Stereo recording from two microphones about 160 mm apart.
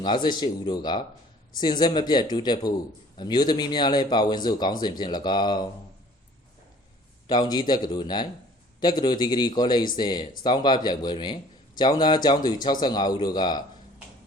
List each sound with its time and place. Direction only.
0.0 s speech: 30° left (ahead or behind)
7.3 s speech: 25° left (ahead or behind)